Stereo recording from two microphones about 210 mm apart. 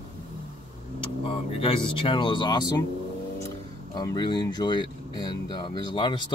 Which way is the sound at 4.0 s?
20° left (ahead or behind).